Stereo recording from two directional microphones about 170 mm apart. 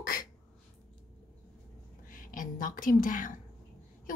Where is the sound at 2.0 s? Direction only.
55° left (ahead or behind).